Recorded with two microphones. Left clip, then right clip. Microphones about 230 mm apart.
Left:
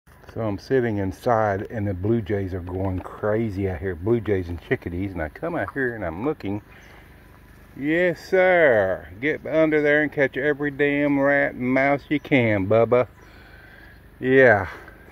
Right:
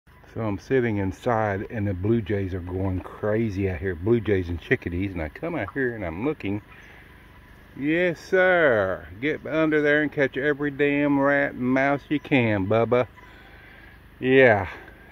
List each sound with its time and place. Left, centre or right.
0.3 s speech: centre
7.8 s speech: centre
14.2 s speech: centre